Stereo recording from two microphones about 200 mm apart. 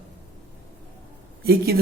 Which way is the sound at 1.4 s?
50° right (ahead or behind).